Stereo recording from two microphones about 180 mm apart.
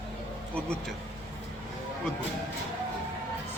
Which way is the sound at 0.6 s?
5° left (ahead or behind).